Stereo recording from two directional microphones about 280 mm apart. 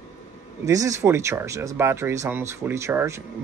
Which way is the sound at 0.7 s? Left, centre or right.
Centre.